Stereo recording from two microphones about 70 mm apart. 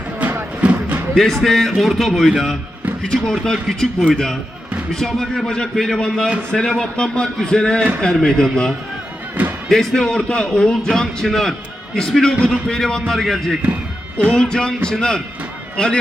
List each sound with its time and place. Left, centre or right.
0.2 s music: right
1.1 s a man's voice: centre
4.9 s a man's voice: centre